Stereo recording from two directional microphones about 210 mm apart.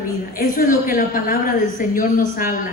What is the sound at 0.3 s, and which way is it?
A woman's voice, 40° left (ahead or behind).